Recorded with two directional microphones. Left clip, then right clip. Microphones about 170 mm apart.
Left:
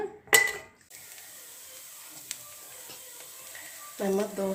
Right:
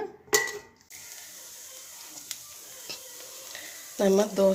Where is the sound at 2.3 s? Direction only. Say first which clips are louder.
Right 1 dB; 25° left (ahead or behind).